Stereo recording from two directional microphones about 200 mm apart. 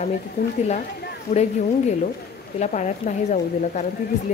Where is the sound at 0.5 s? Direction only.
35° left (ahead or behind).